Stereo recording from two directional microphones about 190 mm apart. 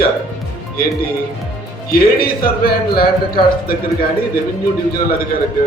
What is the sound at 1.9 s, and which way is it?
A man's voice, 55° left (ahead or behind).